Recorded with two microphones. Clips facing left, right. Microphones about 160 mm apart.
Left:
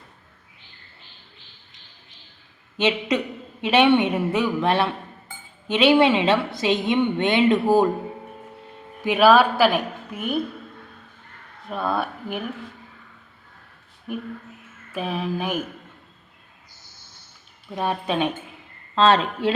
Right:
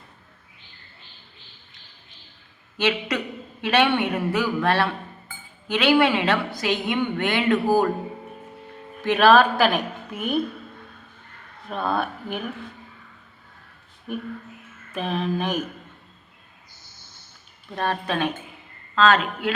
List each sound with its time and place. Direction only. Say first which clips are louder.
2.7 s a woman's voice: left 2 dB; 20° left (ahead or behind)
9.0 s a woman's voice: even; 10° left (ahead or behind)
11.7 s a woman's voice: even; 5° left (ahead or behind)
14.9 s a woman's voice: right 1 dB; 5° left (ahead or behind)
17.7 s speech: left 1 dB; 15° left (ahead or behind)
18.9 s speech: left 1 dB; 30° left (ahead or behind)